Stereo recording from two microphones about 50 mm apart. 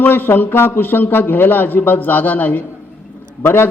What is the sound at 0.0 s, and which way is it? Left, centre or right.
A man's voice, left.